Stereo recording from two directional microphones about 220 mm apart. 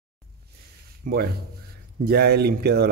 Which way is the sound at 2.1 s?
45° right (ahead or behind).